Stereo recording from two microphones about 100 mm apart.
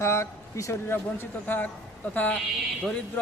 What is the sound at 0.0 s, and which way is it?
A man's voice, 25° left (ahead or behind).